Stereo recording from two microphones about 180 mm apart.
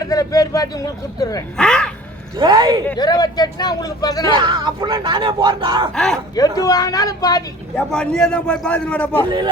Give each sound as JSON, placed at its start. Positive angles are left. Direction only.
{"t": 0.0, "sound": "a sound", "side_deg": 20}
{"t": 1.2, "sound": "speech", "side_deg": 20}
{"t": 1.5, "sound": "a man's voice", "side_deg": 5}
{"t": 2.4, "sound": "speech", "side_deg": -25}
{"t": 3.0, "sound": "speech", "side_deg": 20}
{"t": 4.3, "sound": "speech", "side_deg": -25}
{"t": 5.9, "sound": "a man's voice", "side_deg": 0}
{"t": 6.3, "sound": "speech", "side_deg": 20}
{"t": 7.8, "sound": "a man's voice", "side_deg": 5}